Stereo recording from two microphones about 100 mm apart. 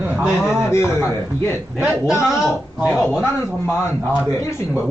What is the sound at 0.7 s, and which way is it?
Speech, 25° left (ahead or behind).